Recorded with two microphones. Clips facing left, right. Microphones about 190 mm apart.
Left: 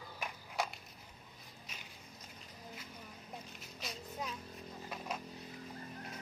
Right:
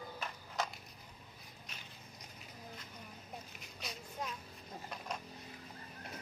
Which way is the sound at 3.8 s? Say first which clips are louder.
Even; centre (ahead or behind).